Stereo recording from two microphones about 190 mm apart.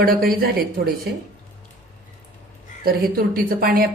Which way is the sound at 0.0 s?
50° right (ahead or behind).